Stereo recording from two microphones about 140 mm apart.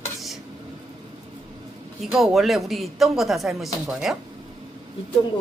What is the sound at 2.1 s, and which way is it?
A woman's voice, centre (ahead or behind).